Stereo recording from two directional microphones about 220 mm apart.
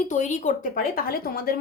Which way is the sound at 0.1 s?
35° left (ahead or behind).